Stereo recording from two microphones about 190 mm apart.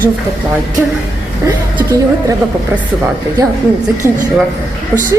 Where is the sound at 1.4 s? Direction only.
15° right (ahead or behind).